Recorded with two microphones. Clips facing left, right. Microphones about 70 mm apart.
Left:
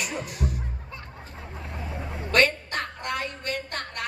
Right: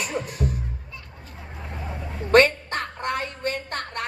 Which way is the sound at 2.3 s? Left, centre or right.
Right.